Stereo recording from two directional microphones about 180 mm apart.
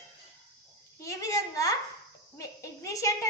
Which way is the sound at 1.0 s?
20° left (ahead or behind).